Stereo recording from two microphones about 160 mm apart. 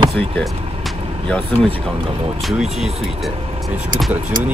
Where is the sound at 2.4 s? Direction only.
Centre (ahead or behind).